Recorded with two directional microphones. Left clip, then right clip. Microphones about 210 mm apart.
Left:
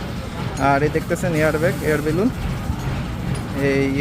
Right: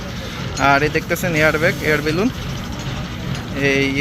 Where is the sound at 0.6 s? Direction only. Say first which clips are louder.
Right 3 dB; centre (ahead or behind).